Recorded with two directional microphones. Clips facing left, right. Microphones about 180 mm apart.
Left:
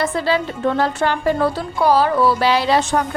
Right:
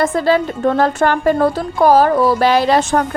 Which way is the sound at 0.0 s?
45° right (ahead or behind).